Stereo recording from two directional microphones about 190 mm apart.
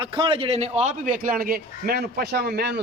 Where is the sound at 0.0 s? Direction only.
25° right (ahead or behind).